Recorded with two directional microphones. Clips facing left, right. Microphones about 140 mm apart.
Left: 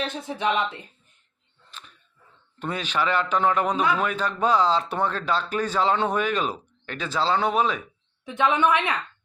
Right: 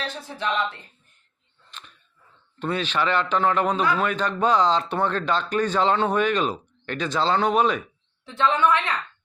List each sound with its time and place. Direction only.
0.0 s a woman's voice: 20° left (ahead or behind)
1.7 s a sound: 5° left (ahead or behind)
2.6 s speech: 10° left (ahead or behind)
8.2 s a woman's voice: 15° left (ahead or behind)